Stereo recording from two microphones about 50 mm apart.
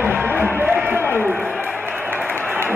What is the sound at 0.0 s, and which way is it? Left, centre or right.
Music, right.